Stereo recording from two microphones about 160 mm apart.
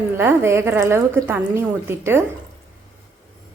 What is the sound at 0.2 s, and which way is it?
A woman's voice, 15° right (ahead or behind).